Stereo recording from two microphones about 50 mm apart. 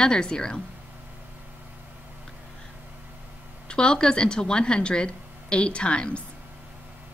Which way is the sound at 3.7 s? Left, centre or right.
Centre.